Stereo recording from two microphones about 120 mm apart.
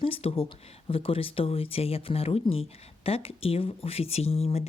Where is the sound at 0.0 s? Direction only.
55° left (ahead or behind).